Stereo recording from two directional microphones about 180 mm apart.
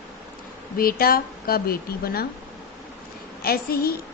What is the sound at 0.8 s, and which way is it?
A woman's voice, 55° left (ahead or behind).